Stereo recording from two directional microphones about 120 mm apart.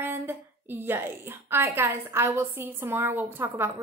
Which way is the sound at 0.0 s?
20° right (ahead or behind).